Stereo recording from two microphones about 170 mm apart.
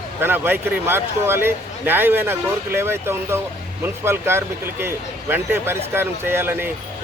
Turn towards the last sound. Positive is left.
turn(degrees=-15)  # may be behind; listen again after turning